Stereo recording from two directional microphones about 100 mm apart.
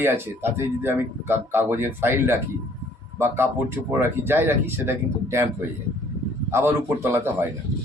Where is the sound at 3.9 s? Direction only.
25° right (ahead or behind).